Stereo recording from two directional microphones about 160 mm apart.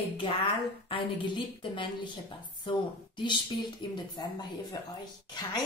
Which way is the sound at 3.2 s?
25° left (ahead or behind).